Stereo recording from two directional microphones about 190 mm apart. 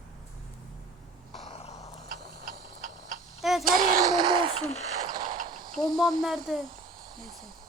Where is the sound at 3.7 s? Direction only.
45° right (ahead or behind).